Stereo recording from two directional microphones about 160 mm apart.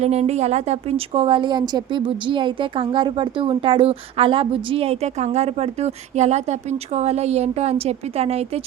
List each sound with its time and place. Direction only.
0.0 s a woman's voice: 45° right (ahead or behind)